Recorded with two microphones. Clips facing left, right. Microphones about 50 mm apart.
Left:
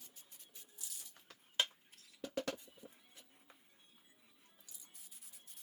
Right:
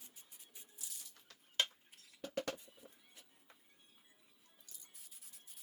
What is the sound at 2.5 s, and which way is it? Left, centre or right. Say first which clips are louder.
Music: left 1 dB; centre.